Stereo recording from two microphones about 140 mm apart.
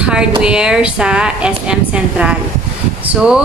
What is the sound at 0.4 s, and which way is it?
A woman's voice, 5° right (ahead or behind).